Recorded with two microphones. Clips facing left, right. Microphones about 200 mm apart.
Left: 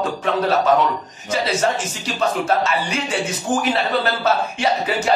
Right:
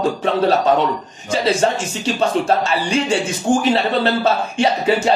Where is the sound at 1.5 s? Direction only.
30° right (ahead or behind).